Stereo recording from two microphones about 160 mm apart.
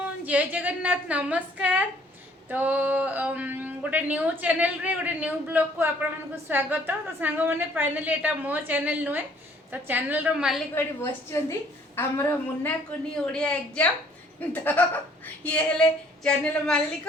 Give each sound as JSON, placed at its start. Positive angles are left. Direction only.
{"t": 0.0, "sound": "speech", "side_deg": -10}
{"t": 10.8, "sound": "a man's voice", "side_deg": 15}